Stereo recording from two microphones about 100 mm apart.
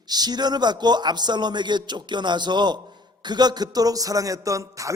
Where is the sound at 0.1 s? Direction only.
45° right (ahead or behind).